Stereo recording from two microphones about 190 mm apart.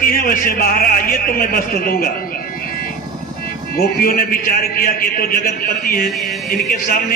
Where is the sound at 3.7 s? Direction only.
50° left (ahead or behind).